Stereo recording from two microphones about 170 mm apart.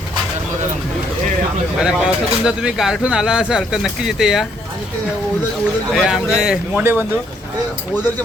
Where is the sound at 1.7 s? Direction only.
5° right (ahead or behind).